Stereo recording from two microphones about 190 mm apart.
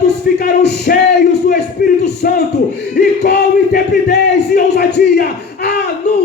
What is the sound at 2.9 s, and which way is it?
Music, 55° left (ahead or behind).